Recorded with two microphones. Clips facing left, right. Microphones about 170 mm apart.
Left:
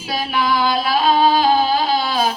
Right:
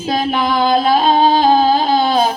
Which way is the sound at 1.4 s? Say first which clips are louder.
Right 4 dB; 45° right (ahead or behind).